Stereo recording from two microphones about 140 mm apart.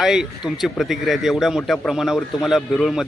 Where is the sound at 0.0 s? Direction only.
5° right (ahead or behind).